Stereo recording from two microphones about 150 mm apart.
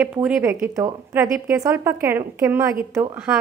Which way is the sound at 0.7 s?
20° right (ahead or behind).